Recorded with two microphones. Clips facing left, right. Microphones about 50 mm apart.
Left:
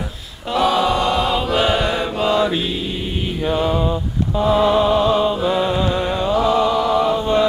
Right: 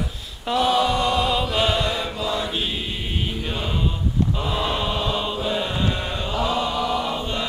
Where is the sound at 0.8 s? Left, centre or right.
Left.